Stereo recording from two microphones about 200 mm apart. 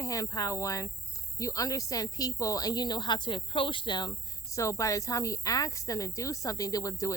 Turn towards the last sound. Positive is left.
turn(degrees=15)  # may be behind; listen again after turning